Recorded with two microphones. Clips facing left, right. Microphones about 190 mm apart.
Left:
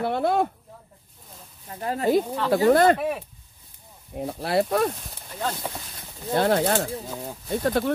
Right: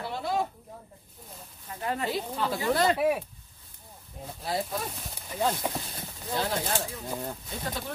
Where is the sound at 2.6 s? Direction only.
55° left (ahead or behind).